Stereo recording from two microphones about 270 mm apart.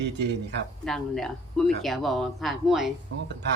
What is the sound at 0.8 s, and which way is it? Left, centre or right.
Speech, centre.